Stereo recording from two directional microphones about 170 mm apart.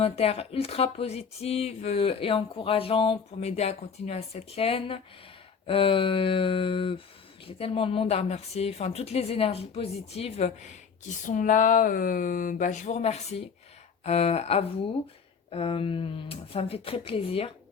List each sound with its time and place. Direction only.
0.0 s speech: 35° left (ahead or behind)